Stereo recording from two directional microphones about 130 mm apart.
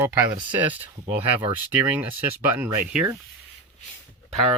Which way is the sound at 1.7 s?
15° right (ahead or behind).